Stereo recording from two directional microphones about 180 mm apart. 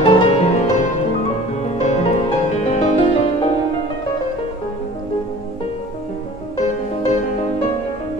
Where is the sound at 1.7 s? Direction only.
40° left (ahead or behind).